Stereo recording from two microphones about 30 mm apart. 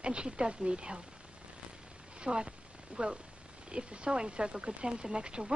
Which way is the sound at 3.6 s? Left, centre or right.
Right.